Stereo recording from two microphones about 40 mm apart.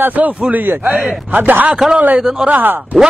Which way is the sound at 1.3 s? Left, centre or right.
Right.